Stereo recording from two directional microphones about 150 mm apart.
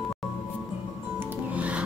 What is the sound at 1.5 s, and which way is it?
Music, 10° right (ahead or behind).